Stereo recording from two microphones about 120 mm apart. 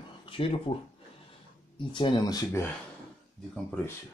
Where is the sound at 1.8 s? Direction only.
40° left (ahead or behind).